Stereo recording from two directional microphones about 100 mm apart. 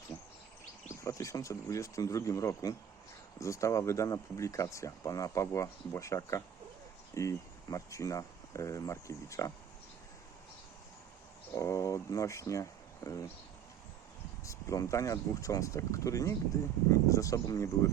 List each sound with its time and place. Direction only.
1.0 s speech: 30° left (ahead or behind)
11.5 s speech: 30° left (ahead or behind)
14.4 s speech: 30° left (ahead or behind)